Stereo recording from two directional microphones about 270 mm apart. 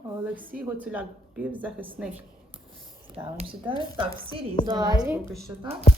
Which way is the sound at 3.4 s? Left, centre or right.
Centre.